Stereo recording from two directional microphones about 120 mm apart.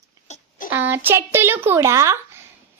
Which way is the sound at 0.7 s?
15° right (ahead or behind).